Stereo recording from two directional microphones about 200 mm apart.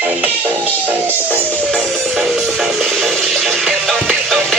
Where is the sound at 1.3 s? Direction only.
Centre (ahead or behind).